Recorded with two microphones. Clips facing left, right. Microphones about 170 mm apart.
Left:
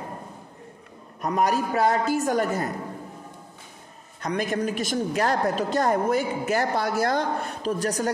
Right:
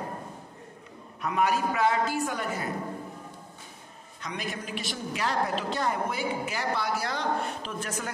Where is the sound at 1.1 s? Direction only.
40° left (ahead or behind).